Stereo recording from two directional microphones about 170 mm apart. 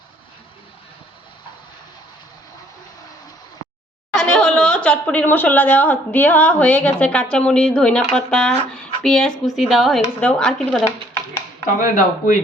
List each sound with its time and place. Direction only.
4.1 s speech: 5° left (ahead or behind)
11.8 s speech: 55° left (ahead or behind)